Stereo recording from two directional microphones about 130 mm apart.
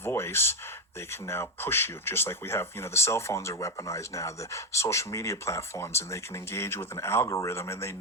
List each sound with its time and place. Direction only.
0.0 s speech: 20° left (ahead or behind)